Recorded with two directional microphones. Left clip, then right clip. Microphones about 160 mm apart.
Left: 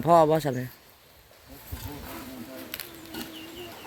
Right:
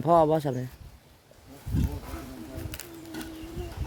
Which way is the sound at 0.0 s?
15° right (ahead or behind).